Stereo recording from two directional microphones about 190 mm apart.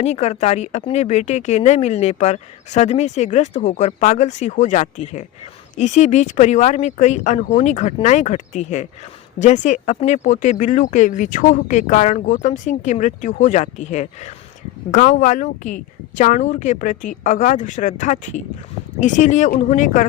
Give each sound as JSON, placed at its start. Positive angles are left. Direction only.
{"t": 0.0, "sound": "speech", "side_deg": 35}